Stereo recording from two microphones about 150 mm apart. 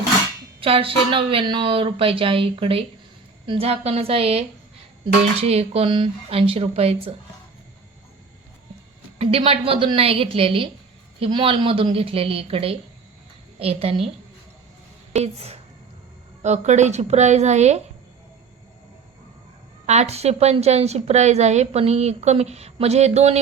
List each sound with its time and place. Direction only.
0.6 s speech: 35° right (ahead or behind)
9.1 s speech: 40° right (ahead or behind)
15.1 s a woman's voice: 45° right (ahead or behind)
19.8 s a woman's voice: 45° right (ahead or behind)